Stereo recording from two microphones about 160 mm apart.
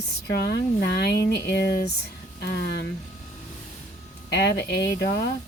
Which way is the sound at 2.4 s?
90° left.